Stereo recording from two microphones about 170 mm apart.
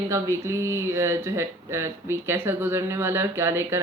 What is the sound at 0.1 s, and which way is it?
Speech, 15° right (ahead or behind).